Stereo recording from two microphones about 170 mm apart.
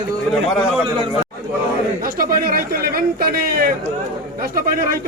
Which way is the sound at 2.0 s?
60° right (ahead or behind).